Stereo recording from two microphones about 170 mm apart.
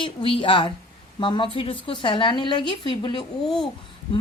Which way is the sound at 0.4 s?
30° left (ahead or behind).